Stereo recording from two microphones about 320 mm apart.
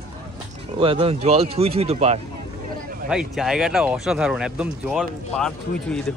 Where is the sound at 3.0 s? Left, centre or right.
Centre.